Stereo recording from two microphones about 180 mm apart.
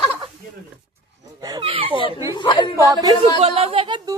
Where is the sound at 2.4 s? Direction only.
25° left (ahead or behind).